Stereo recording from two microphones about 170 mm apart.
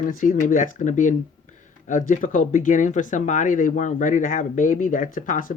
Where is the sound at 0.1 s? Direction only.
50° left (ahead or behind).